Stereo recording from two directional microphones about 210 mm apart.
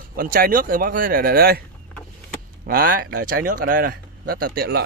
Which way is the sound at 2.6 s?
45° right (ahead or behind).